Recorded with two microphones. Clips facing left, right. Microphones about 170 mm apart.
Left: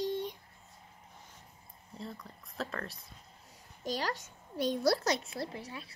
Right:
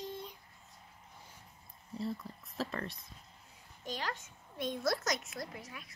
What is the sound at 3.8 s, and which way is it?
A child's voice, 40° left (ahead or behind).